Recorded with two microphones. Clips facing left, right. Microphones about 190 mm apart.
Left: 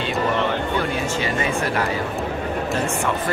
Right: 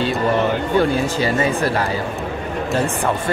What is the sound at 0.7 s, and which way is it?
Speech, 35° right (ahead or behind).